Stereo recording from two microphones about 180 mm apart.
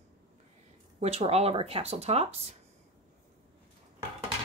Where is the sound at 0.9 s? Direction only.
35° right (ahead or behind).